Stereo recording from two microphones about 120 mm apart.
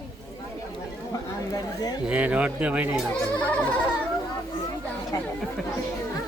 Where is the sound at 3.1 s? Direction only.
10° left (ahead or behind).